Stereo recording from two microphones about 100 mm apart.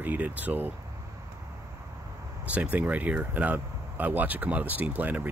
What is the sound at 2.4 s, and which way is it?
Speech, 15° right (ahead or behind).